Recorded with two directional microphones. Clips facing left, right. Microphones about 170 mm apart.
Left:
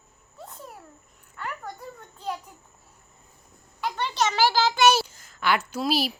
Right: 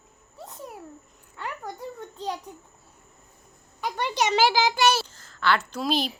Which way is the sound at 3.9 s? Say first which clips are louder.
Right 2 dB; 15° right (ahead or behind).